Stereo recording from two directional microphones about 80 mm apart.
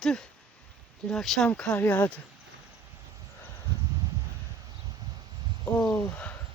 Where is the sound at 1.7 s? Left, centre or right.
Left.